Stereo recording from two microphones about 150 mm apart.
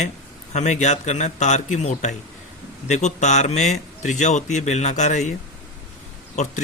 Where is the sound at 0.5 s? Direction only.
50° left (ahead or behind).